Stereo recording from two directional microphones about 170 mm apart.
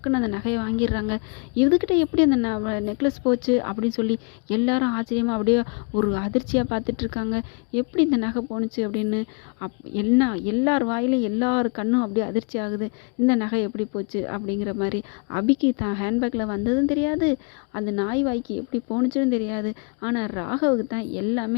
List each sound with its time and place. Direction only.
0.0 s speech: 25° left (ahead or behind)